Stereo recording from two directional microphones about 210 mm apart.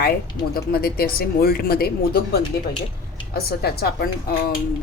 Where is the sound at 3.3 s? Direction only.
50° left (ahead or behind).